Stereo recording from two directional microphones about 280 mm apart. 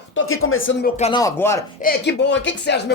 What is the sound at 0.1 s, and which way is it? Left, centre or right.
Speech, left.